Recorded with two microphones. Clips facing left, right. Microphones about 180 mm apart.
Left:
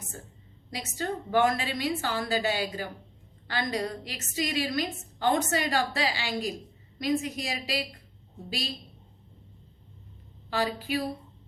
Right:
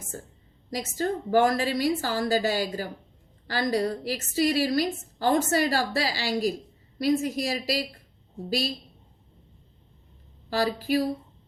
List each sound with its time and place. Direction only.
0.7 s a woman's voice: 40° right (ahead or behind)
10.5 s a woman's voice: 40° right (ahead or behind)